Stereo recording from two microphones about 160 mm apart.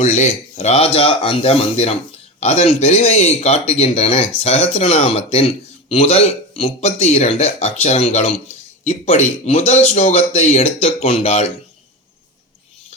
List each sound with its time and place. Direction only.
0.0 s speech: 45° left (ahead or behind)